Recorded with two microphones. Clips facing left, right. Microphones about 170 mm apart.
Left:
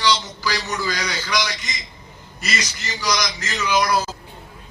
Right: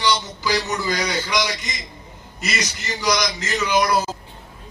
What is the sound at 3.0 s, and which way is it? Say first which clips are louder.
A man's voice: right 2 dB; 20° right (ahead or behind).